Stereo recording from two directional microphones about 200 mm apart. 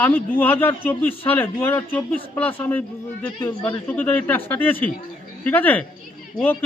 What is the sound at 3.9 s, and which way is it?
A man's voice, 10° left (ahead or behind).